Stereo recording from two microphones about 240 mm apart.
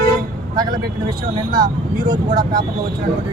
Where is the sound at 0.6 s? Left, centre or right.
Centre.